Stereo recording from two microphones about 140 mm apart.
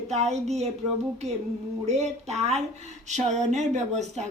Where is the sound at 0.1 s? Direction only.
50° right (ahead or behind).